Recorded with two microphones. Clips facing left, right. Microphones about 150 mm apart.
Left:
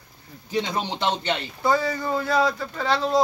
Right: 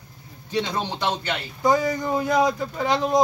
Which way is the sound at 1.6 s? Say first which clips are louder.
Right 3 dB; 15° right (ahead or behind).